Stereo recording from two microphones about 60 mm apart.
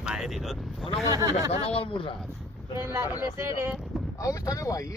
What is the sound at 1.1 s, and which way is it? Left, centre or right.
Speech, right.